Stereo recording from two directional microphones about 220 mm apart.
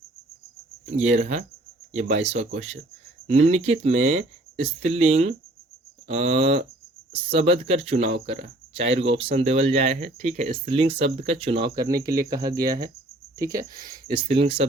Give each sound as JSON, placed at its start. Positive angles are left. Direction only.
{"t": 0.9, "sound": "speech", "side_deg": -30}